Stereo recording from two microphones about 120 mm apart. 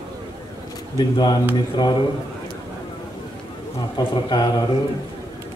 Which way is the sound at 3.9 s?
40° left (ahead or behind).